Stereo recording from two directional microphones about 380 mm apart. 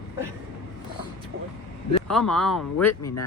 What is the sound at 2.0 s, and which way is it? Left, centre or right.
Speech, centre.